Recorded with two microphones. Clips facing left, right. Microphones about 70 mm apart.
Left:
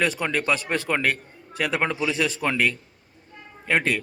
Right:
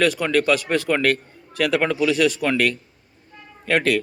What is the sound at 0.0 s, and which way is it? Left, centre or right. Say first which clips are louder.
Speech: right 5 dB; left.